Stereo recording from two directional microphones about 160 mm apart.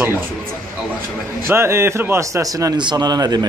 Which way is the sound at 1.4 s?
15° right (ahead or behind).